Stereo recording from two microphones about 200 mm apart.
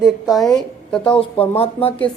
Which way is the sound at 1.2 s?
30° left (ahead or behind).